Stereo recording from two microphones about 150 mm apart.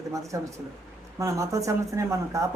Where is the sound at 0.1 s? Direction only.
20° right (ahead or behind).